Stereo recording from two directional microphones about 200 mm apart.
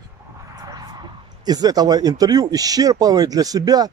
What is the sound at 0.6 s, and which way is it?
Speech, 20° right (ahead or behind).